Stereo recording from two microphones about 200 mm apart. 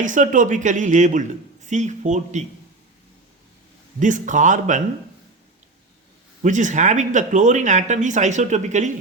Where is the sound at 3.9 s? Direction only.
40° right (ahead or behind).